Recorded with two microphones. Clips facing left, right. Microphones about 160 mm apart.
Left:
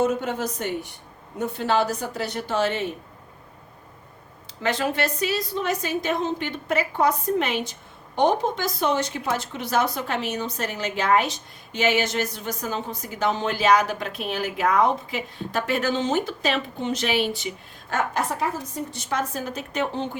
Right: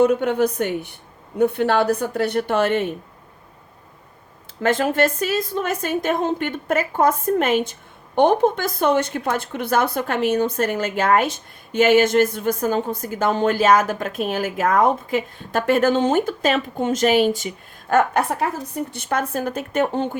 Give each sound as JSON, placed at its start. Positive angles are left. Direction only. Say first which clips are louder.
{"t": 0.0, "sound": "a woman's voice", "louder": "right 7 dB", "side_deg": -60}
{"t": 4.6, "sound": "a woman's voice", "louder": "right 6 dB", "side_deg": -50}